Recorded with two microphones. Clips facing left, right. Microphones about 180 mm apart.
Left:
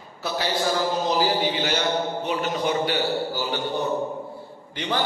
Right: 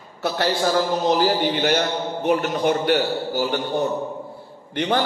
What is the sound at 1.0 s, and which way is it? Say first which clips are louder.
A man's voice: right 3 dB; 55° right (ahead or behind).